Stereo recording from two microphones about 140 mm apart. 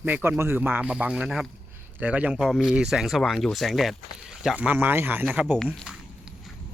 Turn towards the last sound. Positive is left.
turn(degrees=-5)  # may be behind; listen again after turning